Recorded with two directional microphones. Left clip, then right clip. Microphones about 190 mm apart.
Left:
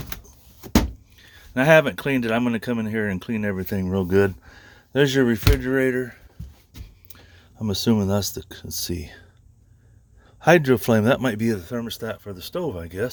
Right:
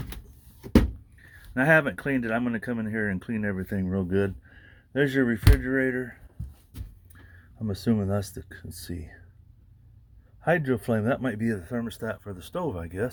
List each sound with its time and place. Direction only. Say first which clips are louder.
1.5 s speech: left 5 dB; 30° left (ahead or behind)
7.7 s speech: left 6 dB; 30° left (ahead or behind)
10.4 s speech: left 8 dB; 50° left (ahead or behind); by 13.1 s 20° left (ahead or behind)